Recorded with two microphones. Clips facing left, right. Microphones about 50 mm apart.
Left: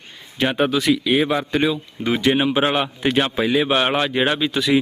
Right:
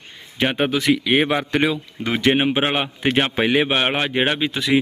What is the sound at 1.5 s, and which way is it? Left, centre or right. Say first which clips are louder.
Speech: even; right.